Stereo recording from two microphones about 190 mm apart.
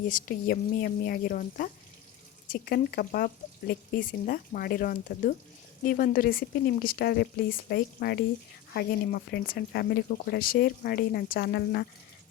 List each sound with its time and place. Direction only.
0.1 s speech: 50° left (ahead or behind)